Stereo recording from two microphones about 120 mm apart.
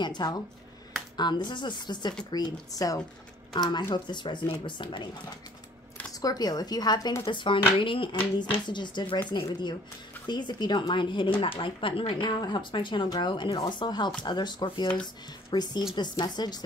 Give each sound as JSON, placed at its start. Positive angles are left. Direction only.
{"t": 0.0, "sound": "speech", "side_deg": 35}
{"t": 6.1, "sound": "speech", "side_deg": 30}
{"t": 7.2, "sound": "speech", "side_deg": 45}